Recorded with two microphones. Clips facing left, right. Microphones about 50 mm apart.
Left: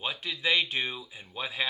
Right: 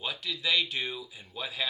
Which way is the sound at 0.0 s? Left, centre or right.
Left.